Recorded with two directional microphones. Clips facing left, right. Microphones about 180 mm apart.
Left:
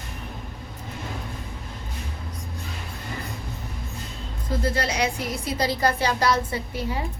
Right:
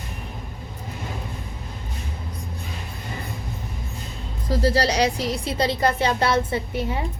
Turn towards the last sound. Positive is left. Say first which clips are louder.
# right 4 dB
turn(degrees=-25)  # may be behind; listen again after turning